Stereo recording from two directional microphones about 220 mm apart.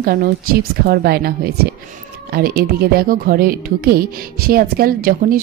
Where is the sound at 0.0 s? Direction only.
40° right (ahead or behind).